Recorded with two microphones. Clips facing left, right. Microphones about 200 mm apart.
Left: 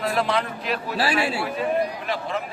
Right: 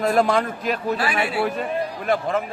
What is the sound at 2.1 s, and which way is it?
Speech, 50° right (ahead or behind).